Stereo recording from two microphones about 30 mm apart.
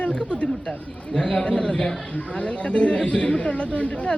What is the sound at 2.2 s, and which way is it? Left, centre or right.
Speech, left.